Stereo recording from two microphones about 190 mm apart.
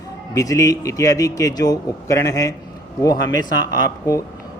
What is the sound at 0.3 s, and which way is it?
Speech, 15° left (ahead or behind).